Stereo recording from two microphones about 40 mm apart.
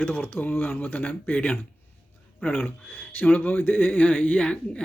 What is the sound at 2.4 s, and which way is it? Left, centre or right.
Speech, left.